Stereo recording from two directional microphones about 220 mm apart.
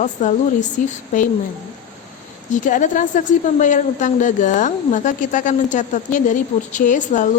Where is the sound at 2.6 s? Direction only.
35° left (ahead or behind).